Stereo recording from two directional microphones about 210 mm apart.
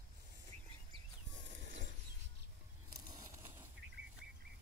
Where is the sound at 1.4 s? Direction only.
60° right (ahead or behind).